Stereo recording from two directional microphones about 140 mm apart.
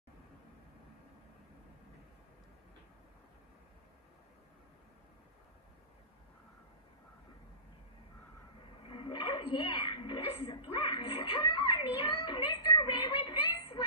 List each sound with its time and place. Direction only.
8.8 s television: 40° left (ahead or behind)